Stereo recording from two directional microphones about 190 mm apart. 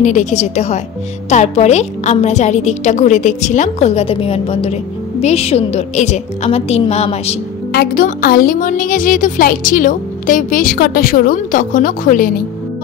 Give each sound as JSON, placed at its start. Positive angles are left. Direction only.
{"t": 0.0, "sound": "a woman's voice", "side_deg": 40}
{"t": 7.7, "sound": "a woman's voice", "side_deg": 50}